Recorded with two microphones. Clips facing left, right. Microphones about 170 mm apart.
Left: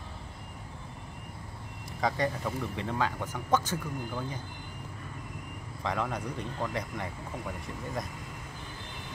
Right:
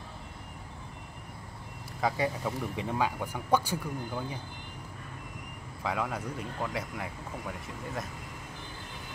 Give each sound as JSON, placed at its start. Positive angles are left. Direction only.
{"t": 2.0, "sound": "speech", "side_deg": -5}
{"t": 5.9, "sound": "speech", "side_deg": -5}